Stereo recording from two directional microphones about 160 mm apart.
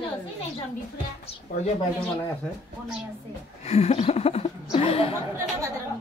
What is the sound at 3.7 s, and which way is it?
Speech, 40° left (ahead or behind).